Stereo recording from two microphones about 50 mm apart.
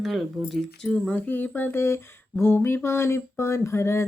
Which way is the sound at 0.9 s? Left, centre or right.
Left.